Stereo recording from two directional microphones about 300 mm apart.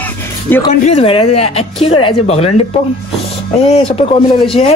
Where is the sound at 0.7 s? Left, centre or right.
Centre.